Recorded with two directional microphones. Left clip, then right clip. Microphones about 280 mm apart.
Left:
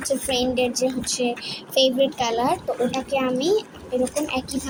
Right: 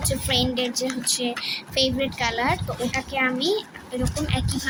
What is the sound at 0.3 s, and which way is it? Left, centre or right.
Speech, centre.